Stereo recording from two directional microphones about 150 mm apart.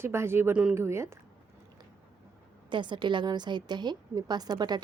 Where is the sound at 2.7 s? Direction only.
30° right (ahead or behind).